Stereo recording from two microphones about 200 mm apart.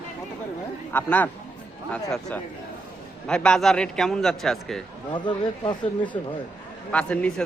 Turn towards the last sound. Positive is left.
turn(degrees=5)  # may be behind; listen again after turning